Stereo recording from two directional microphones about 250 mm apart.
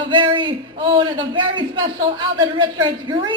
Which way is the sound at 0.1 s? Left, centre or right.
Centre.